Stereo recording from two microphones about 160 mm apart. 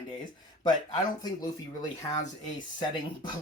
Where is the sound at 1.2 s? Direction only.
25° left (ahead or behind).